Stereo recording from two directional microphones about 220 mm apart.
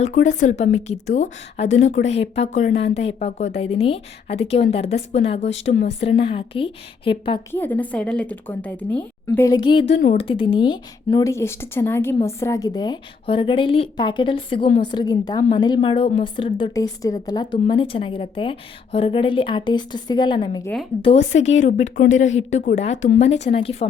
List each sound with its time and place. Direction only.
0.0 s a woman's voice: 35° left (ahead or behind)
7.5 s a woman's voice: 10° left (ahead or behind)
9.9 s a woman's voice: 30° left (ahead or behind)